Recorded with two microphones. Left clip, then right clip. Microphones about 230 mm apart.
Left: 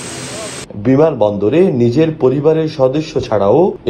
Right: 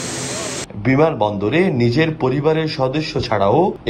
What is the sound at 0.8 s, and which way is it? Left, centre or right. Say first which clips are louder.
A man's voice: left 4 dB; right.